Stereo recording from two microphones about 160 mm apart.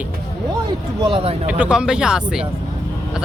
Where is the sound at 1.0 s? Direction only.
35° right (ahead or behind).